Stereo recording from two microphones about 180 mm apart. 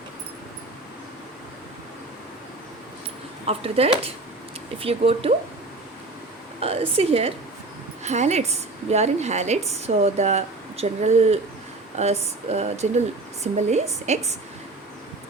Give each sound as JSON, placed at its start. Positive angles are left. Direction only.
{"t": 3.4, "sound": "a woman's voice", "side_deg": -35}
{"t": 6.6, "sound": "a woman's voice", "side_deg": -35}